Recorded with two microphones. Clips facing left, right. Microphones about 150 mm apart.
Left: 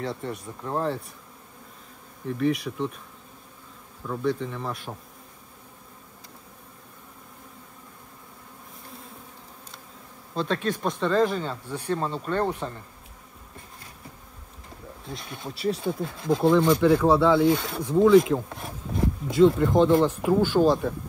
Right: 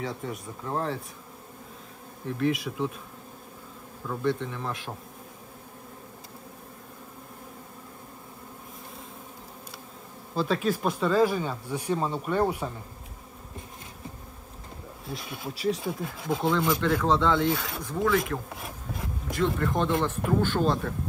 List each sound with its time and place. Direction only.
0.0 s speech: centre (ahead or behind)
2.2 s speech: centre (ahead or behind)
4.1 s speech: centre (ahead or behind)
10.3 s speech: 5° right (ahead or behind)
15.0 s speech: 5° right (ahead or behind)
16.8 s speech: 10° left (ahead or behind)
17.9 s speech: 20° left (ahead or behind)
18.5 s a sound: centre (ahead or behind)
20.0 s speech: 5° left (ahead or behind)